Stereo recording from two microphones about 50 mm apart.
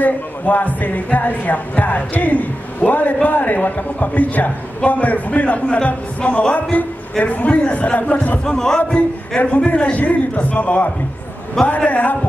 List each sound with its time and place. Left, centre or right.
0.0 s a man's voice: left
8.5 s a man's voice: centre; by 12.2 s left